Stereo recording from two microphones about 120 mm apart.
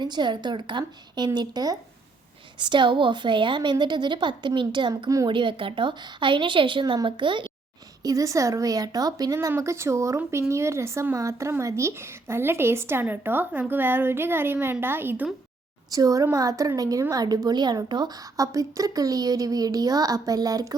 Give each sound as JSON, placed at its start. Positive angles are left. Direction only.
{"t": 0.0, "sound": "a woman's voice", "side_deg": -40}
{"t": 5.0, "sound": "speech", "side_deg": -30}
{"t": 5.3, "sound": "a woman's voice", "side_deg": -45}
{"t": 8.0, "sound": "speech", "side_deg": -25}
{"t": 15.9, "sound": "a woman's voice", "side_deg": -30}